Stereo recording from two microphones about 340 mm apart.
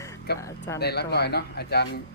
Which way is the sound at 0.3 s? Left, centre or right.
Left.